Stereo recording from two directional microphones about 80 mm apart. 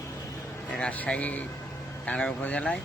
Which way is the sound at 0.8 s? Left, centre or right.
Centre.